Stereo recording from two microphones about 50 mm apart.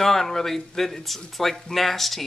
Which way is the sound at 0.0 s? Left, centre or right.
Centre.